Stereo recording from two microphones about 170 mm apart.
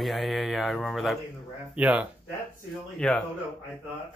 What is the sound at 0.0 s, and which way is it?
Speech, centre (ahead or behind).